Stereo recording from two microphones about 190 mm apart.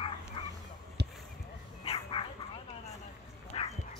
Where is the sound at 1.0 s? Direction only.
60° right (ahead or behind).